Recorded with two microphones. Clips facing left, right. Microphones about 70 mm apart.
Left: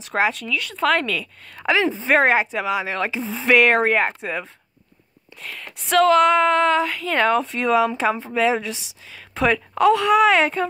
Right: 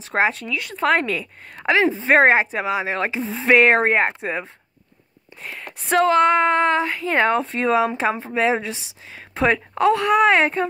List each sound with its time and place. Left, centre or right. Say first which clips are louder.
0.0 s speech: right 1 dB; right
9.8 s speech: left 2 dB; centre
10.0 s speech: even; right